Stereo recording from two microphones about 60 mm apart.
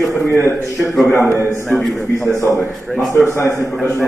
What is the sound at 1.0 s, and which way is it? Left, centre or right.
A man's voice, left.